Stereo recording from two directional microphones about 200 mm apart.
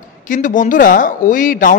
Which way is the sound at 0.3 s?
40° left (ahead or behind).